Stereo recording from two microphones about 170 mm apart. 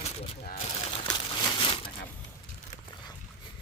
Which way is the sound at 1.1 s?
25° left (ahead or behind).